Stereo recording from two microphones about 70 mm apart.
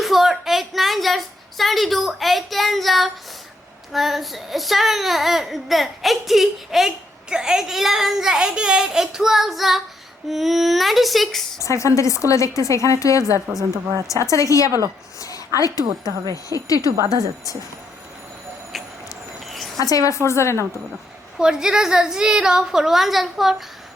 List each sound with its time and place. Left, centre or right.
0.0 s a sound: centre
3.9 s speech: centre
11.6 s a woman's voice: left
15.8 s a woman's voice: right
16.2 s a woman's voice: left
19.8 s a woman's voice: left
21.3 s a woman's voice: centre